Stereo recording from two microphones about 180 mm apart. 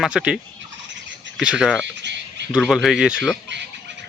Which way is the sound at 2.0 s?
75° right (ahead or behind).